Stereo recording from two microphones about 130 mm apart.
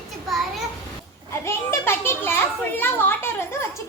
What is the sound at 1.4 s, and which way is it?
Children playing, 20° left (ahead or behind).